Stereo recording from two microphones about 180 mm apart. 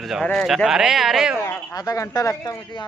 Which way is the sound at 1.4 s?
15° left (ahead or behind).